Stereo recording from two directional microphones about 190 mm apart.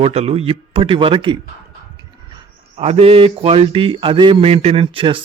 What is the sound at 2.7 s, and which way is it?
A man's voice, 30° right (ahead or behind).